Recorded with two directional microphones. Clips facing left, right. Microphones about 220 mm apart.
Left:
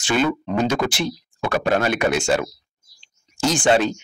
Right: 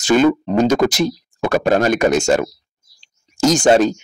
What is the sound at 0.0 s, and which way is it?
Speech, 40° right (ahead or behind).